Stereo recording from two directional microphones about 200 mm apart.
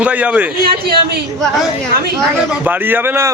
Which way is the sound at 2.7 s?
10° right (ahead or behind).